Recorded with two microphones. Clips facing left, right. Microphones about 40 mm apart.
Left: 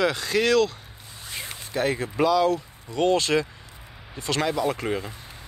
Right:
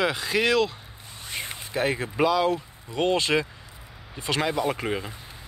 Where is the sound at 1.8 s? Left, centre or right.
Centre.